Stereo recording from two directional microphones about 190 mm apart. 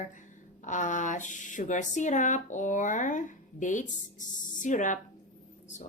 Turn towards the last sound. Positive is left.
turn(degrees=40)  # may be behind; listen again after turning